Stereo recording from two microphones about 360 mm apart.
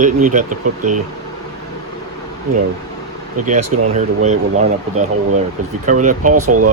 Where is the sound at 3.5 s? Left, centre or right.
Centre.